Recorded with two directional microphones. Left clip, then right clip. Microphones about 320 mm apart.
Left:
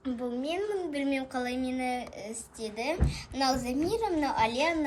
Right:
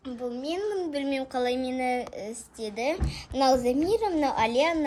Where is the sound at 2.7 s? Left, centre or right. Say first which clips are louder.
Right 3 dB; centre.